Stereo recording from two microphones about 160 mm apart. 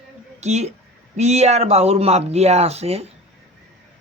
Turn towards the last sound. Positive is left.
turn(degrees=-40)  # may be behind; listen again after turning